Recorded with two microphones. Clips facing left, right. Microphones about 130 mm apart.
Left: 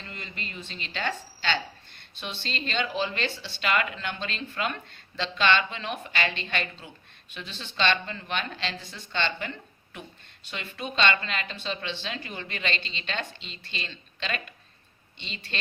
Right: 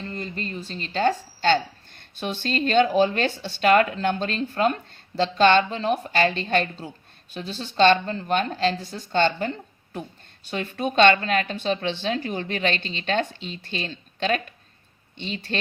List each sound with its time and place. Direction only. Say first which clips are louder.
0.0 s speech: right 9 dB; 40° right (ahead or behind)